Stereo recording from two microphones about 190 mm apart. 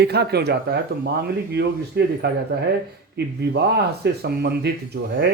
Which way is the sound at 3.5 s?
60° right (ahead or behind).